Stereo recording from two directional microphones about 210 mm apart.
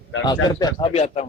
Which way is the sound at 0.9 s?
30° left (ahead or behind).